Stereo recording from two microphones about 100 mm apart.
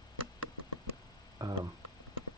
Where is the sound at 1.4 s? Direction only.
40° right (ahead or behind).